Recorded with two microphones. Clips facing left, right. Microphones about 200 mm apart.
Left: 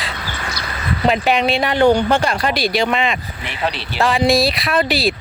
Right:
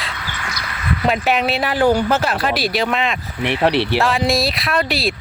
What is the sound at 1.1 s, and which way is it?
Speech, centre (ahead or behind).